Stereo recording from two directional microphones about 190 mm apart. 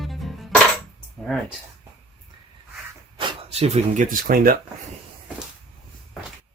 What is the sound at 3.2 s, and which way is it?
Speech, 35° right (ahead or behind).